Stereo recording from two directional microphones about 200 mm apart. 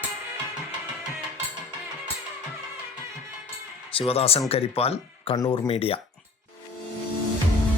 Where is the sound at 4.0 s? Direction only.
30° left (ahead or behind).